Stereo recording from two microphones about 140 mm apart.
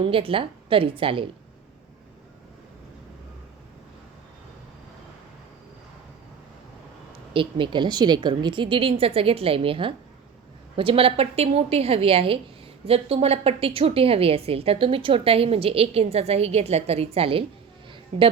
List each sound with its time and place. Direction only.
0.0 s a woman's voice: 40° right (ahead or behind)
7.3 s a woman's voice: 35° right (ahead or behind)